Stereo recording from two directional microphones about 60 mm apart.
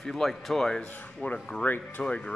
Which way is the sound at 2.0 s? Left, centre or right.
Centre.